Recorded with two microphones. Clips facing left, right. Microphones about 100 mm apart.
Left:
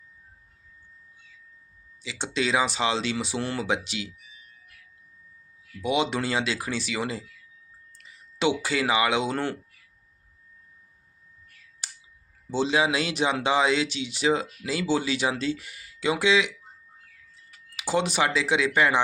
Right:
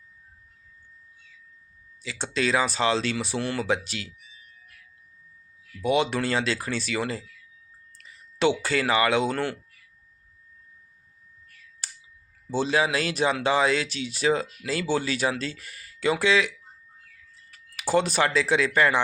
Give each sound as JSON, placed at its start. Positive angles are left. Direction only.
{"t": 2.0, "sound": "speech", "side_deg": 15}
{"t": 5.8, "sound": "speech", "side_deg": 15}
{"t": 11.8, "sound": "a sound", "side_deg": 15}
{"t": 12.5, "sound": "speech", "side_deg": 15}
{"t": 17.5, "sound": "speech", "side_deg": 20}